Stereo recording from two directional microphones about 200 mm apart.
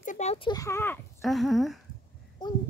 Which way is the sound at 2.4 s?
20° left (ahead or behind).